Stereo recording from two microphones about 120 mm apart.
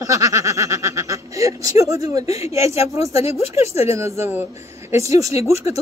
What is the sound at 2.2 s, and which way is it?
Speech, 60° left (ahead or behind).